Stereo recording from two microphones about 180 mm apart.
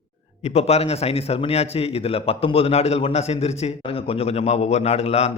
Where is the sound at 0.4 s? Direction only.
35° left (ahead or behind).